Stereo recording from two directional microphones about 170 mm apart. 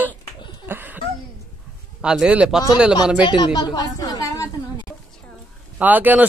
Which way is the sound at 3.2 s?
25° left (ahead or behind).